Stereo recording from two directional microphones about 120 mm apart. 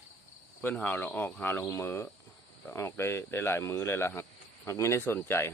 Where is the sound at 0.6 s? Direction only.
15° left (ahead or behind).